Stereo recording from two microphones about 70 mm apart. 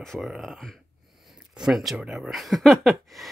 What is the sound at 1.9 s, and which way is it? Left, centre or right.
Speech, centre.